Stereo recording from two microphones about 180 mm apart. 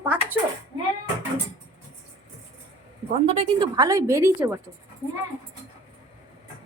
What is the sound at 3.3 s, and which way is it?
A woman's voice, 30° right (ahead or behind).